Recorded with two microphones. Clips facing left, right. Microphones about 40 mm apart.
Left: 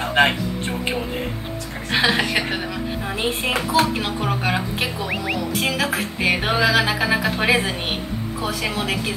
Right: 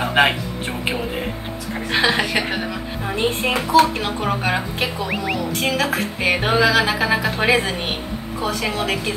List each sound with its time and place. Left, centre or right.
0.0 s a woman's voice: centre